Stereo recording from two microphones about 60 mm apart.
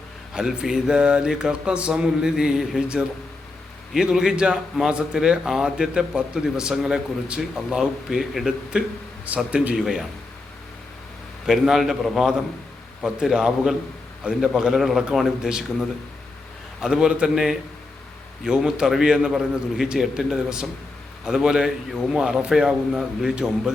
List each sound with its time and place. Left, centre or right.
0.3 s a man's voice: centre
8.7 s a man's voice: centre
9.7 s a man's voice: centre
11.4 s a man's voice: centre